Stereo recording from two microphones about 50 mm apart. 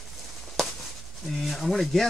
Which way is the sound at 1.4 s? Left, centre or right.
Centre.